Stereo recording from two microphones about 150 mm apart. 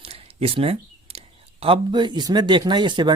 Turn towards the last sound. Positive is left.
turn(degrees=-30)  # may be behind; listen again after turning